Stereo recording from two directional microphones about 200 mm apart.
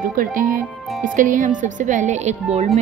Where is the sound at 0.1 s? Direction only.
45° right (ahead or behind).